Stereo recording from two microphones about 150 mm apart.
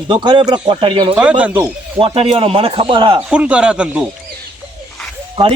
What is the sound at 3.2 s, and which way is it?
Speech, 10° right (ahead or behind).